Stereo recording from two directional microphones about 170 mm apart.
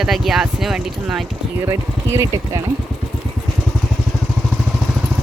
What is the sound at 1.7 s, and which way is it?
Speech, 15° right (ahead or behind).